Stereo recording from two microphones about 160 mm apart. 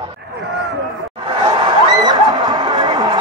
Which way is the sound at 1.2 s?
30° right (ahead or behind).